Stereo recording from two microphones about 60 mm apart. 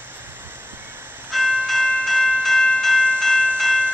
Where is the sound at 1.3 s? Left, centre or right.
Centre.